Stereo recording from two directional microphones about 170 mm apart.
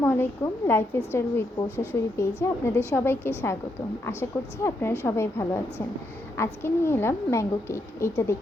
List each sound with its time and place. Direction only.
0.0 s a woman's voice: 10° left (ahead or behind)